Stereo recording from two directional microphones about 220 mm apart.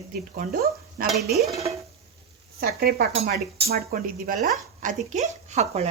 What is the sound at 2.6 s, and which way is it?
Speech, 45° right (ahead or behind).